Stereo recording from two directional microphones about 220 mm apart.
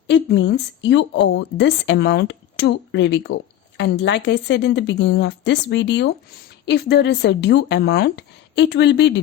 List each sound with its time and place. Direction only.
0.1 s a woman's voice: 55° left (ahead or behind)